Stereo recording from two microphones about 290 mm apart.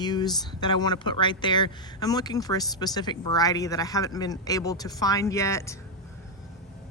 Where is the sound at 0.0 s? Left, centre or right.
Centre.